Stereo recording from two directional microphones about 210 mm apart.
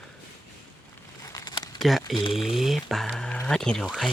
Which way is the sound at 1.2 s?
20° left (ahead or behind).